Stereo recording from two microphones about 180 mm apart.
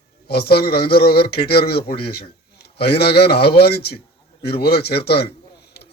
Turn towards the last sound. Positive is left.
turn(degrees=65)  # may be behind; listen again after turning